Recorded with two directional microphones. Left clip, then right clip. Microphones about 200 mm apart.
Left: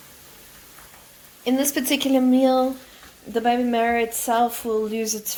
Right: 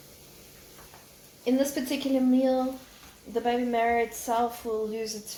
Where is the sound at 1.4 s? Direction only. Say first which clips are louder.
Left 4 dB; 50° left (ahead or behind).